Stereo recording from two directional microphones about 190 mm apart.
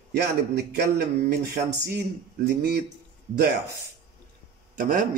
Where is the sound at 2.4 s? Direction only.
55° right (ahead or behind).